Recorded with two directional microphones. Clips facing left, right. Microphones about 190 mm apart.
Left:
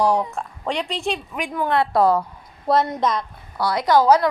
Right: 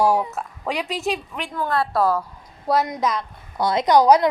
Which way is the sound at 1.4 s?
15° left (ahead or behind).